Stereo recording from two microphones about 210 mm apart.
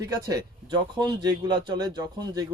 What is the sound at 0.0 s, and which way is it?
Speech, 15° right (ahead or behind).